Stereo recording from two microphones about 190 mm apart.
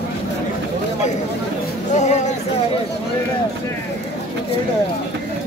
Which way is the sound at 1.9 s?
35° left (ahead or behind).